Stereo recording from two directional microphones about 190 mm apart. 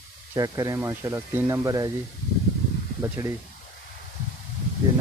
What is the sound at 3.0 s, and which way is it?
Speech, 15° right (ahead or behind).